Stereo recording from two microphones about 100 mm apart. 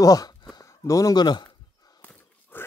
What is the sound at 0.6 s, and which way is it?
Speech, 35° left (ahead or behind).